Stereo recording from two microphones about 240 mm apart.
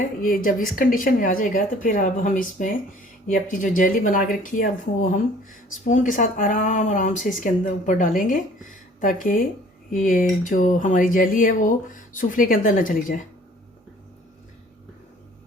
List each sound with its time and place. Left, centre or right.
0.2 s speech: left